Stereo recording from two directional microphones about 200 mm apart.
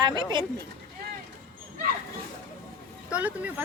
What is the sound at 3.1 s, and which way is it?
Speech, 5° right (ahead or behind).